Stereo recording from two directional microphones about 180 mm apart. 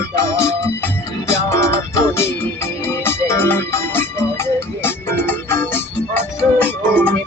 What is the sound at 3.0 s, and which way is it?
Organ, 15° left (ahead or behind).